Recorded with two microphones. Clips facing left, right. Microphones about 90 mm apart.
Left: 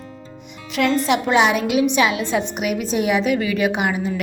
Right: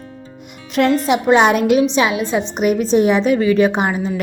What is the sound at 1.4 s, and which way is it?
Speech, 45° right (ahead or behind).